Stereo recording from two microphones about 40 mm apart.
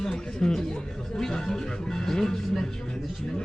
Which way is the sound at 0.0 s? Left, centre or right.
Centre.